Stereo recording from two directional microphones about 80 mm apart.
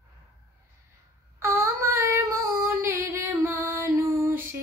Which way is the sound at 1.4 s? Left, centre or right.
Right.